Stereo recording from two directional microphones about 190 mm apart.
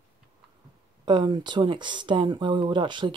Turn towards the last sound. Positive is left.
turn(degrees=-25)  # may be behind; listen again after turning